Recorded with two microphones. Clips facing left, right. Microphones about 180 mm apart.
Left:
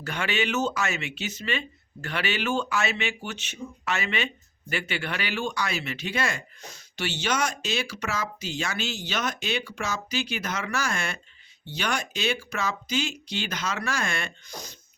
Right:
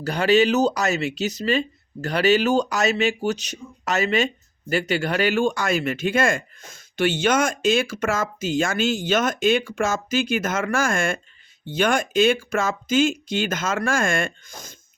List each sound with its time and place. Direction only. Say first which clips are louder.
0.0 s speech: right 11 dB; 35° right (ahead or behind)